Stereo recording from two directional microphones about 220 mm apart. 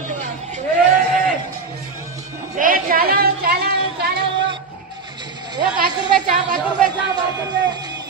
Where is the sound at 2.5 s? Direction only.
40° right (ahead or behind).